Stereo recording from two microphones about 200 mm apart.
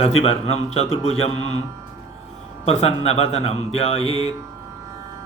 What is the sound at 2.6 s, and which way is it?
A man's voice, 30° left (ahead or behind).